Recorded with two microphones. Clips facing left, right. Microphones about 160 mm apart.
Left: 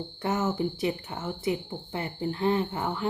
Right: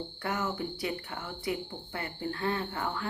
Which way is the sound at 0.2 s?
25° left (ahead or behind).